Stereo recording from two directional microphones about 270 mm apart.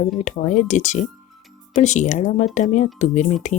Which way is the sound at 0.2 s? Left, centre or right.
Left.